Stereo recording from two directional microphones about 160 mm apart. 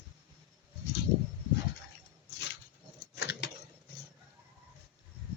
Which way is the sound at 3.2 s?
90° left.